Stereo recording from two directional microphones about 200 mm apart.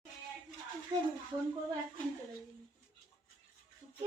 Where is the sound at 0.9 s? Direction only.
20° right (ahead or behind).